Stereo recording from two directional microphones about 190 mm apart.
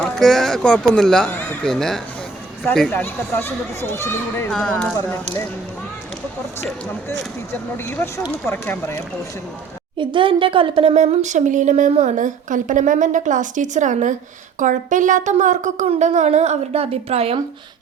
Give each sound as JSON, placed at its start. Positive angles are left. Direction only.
{"t": 0.0, "sound": "speech", "side_deg": 0}
{"t": 7.9, "sound": "speech", "side_deg": 10}
{"t": 10.0, "sound": "speech", "side_deg": -25}